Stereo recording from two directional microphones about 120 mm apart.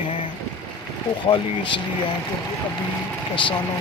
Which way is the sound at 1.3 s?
50° left (ahead or behind).